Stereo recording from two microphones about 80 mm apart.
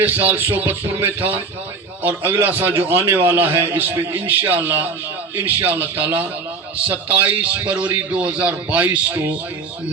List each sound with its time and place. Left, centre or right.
0.0 s a man's voice: right